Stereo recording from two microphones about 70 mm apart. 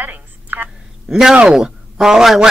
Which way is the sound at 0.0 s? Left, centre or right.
Right.